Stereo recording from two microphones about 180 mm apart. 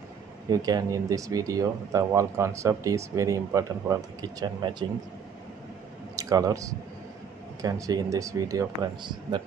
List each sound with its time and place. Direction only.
0.5 s speech: 20° right (ahead or behind)
6.1 s speech: 20° right (ahead or behind)